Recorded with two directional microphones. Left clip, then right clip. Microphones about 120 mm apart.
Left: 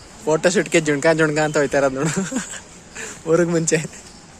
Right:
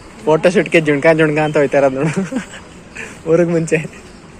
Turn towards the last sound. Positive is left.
turn(degrees=55)  # may be behind; listen again after turning